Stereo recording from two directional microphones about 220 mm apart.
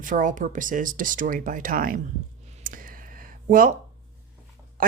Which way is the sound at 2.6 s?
40° right (ahead or behind).